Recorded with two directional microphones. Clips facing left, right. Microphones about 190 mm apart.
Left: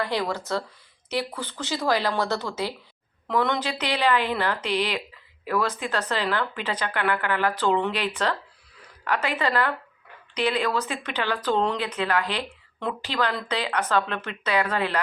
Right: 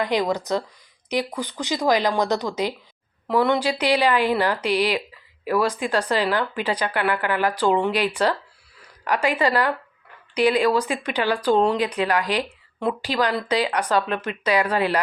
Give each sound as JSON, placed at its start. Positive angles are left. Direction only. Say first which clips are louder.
{"t": 0.0, "sound": "speech", "louder": "right 5 dB", "side_deg": -15}